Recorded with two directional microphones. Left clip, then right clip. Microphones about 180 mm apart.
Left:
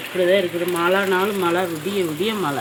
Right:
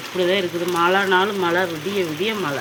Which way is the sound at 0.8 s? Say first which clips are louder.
Right 2 dB; 5° left (ahead or behind).